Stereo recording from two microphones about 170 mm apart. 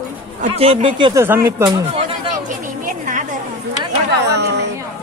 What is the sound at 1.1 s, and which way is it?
Speech, 15° right (ahead or behind).